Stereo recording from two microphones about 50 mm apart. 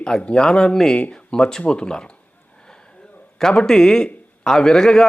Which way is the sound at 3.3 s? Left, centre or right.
Centre.